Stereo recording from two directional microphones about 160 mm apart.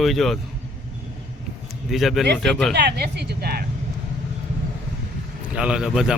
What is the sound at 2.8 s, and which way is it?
Speech, 90° right.